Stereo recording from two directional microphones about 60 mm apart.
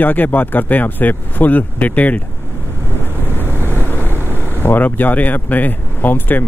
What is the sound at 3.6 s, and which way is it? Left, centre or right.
Vehicle, left.